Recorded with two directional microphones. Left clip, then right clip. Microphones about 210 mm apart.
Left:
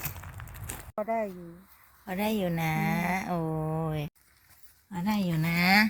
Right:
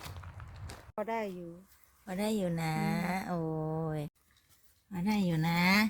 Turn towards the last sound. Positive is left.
turn(degrees=-15)  # may be behind; listen again after turning